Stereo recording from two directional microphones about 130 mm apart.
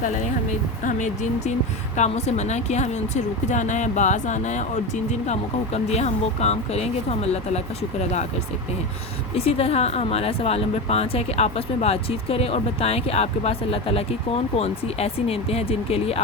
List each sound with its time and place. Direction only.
0.9 s speech: 65° left (ahead or behind)
9.3 s speech: 50° left (ahead or behind)